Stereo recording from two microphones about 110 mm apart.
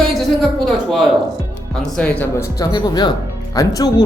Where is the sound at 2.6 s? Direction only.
40° left (ahead or behind).